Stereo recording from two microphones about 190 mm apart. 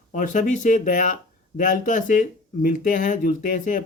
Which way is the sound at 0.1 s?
45° left (ahead or behind).